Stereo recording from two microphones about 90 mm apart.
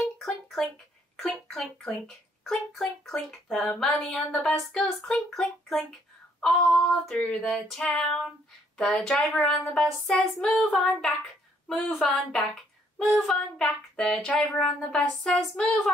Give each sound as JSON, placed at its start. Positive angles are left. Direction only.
{"t": 0.2, "sound": "a sound", "side_deg": 5}
{"t": 1.2, "sound": "a child's voice", "side_deg": 5}
{"t": 7.1, "sound": "child singing", "side_deg": 5}
{"t": 10.5, "sound": "a child's voice", "side_deg": 5}
{"t": 13.3, "sound": "child singing", "side_deg": 5}